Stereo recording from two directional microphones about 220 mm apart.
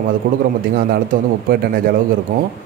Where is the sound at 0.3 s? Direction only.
45° right (ahead or behind).